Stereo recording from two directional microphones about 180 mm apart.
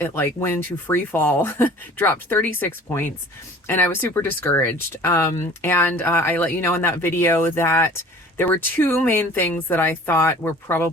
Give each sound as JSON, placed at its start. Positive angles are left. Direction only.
{"t": 0.0, "sound": "speech", "side_deg": 15}